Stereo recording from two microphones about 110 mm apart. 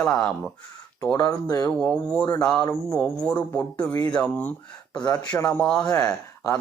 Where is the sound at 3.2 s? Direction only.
15° left (ahead or behind).